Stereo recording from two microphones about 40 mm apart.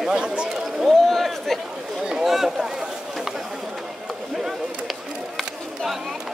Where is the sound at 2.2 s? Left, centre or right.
Centre.